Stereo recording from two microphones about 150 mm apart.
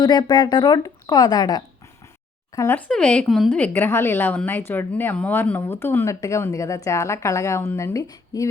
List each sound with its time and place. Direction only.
0.0 s a woman's voice: 30° left (ahead or behind)
2.6 s speech: 15° left (ahead or behind)